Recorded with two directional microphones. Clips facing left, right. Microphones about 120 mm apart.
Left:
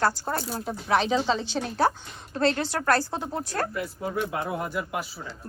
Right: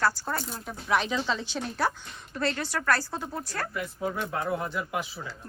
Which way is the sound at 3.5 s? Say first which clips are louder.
Left 6 dB; 40° left (ahead or behind).